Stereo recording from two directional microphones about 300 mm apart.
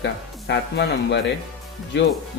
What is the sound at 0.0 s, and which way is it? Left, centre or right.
Speech, left.